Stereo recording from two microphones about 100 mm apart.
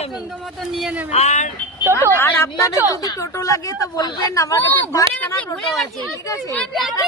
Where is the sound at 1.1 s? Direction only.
90° left.